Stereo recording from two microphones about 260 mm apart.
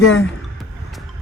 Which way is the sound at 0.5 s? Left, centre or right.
Centre.